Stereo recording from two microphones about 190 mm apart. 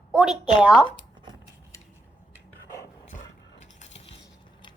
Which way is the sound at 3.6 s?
35° left (ahead or behind).